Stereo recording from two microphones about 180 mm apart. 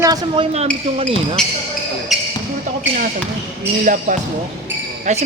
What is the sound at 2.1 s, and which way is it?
Basketball bounce, centre (ahead or behind).